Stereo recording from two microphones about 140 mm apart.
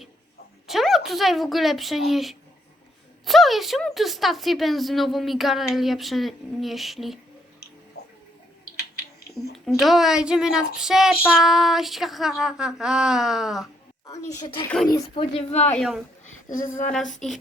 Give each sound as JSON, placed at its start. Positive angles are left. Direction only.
{"t": 0.7, "sound": "speech", "side_deg": 0}
{"t": 9.6, "sound": "speech", "side_deg": 0}
{"t": 14.1, "sound": "a woman's voice", "side_deg": 25}
{"t": 15.1, "sound": "speech", "side_deg": 45}
{"t": 15.8, "sound": "speech", "side_deg": -5}
{"t": 16.2, "sound": "a sound", "side_deg": 70}
{"t": 16.9, "sound": "speech", "side_deg": 5}